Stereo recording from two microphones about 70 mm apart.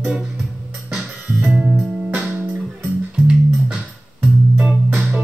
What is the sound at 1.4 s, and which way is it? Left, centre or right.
Music, right.